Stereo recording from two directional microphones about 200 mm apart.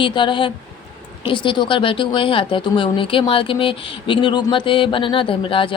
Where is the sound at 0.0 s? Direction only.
25° left (ahead or behind).